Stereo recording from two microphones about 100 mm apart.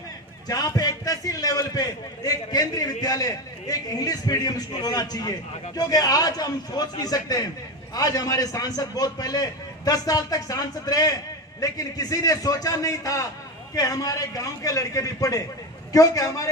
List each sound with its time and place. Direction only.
0.4 s a man's voice: 40° left (ahead or behind)